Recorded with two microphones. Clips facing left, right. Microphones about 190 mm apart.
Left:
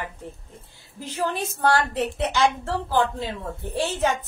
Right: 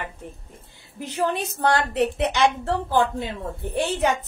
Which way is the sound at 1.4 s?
20° right (ahead or behind).